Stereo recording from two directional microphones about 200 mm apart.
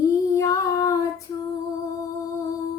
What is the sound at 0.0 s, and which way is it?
Female singing, 15° left (ahead or behind).